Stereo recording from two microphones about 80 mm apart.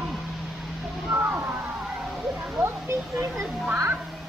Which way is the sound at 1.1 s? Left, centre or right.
Right.